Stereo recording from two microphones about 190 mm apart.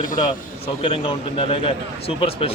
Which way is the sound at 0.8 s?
30° left (ahead or behind).